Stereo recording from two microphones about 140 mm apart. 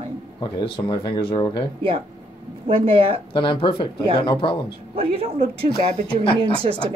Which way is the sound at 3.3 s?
35° left (ahead or behind).